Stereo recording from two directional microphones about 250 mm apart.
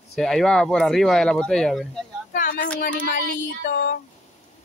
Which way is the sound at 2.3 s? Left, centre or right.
Left.